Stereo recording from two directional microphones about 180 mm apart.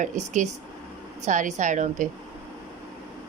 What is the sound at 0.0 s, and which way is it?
A woman's voice, 40° right (ahead or behind).